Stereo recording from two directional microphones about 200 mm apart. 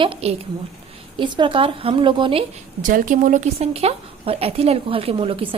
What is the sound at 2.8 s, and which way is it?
Speech, 40° right (ahead or behind).